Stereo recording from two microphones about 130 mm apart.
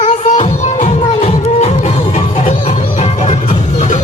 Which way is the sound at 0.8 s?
60° left (ahead or behind).